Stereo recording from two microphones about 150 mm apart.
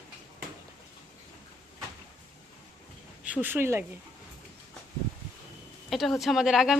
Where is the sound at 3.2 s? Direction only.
10° right (ahead or behind).